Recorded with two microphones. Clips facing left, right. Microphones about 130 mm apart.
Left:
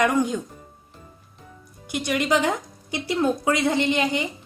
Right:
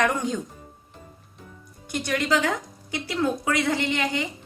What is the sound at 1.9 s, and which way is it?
A woman's voice, 15° left (ahead or behind).